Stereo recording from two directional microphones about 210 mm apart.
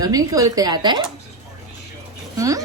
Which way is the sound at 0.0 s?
15° right (ahead or behind).